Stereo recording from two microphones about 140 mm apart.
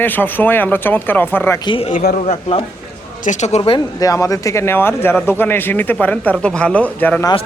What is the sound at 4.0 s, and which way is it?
Speech, 25° left (ahead or behind).